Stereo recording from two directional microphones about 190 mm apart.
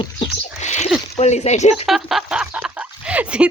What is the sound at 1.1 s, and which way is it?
Speech, 35° left (ahead or behind).